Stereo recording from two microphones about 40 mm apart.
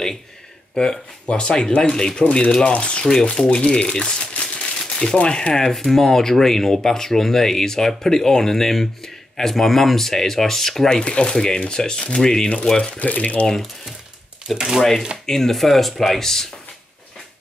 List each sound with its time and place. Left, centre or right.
0.7 s speech: left
3.5 s crumpling: left
5.1 s speech: left
13.0 s speech: left
14.8 s speech: centre